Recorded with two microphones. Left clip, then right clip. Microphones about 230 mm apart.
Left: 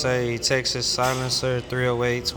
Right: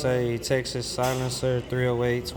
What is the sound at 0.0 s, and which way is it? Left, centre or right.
Speech, centre.